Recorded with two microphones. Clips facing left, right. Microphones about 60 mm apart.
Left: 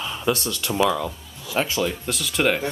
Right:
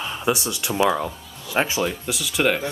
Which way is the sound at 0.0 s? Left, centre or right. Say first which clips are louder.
Right 1 dB; centre.